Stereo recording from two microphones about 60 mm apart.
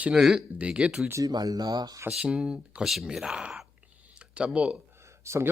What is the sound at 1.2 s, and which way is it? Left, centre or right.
Speech, right.